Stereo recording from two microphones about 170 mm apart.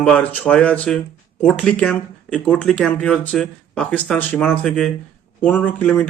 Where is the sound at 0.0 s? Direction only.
10° left (ahead or behind).